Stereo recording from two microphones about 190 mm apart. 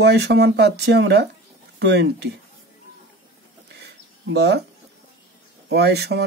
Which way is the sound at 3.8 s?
60° right (ahead or behind).